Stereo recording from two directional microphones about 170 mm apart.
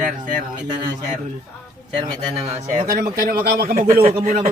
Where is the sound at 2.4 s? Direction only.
50° right (ahead or behind).